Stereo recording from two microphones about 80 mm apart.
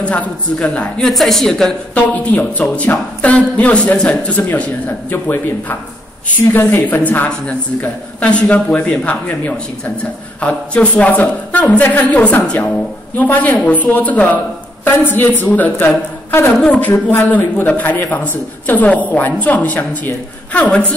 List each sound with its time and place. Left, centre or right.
0.0 s speech: centre
2.0 s speech: centre